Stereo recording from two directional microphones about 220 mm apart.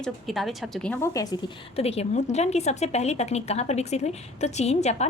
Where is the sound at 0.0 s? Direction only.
Centre (ahead or behind).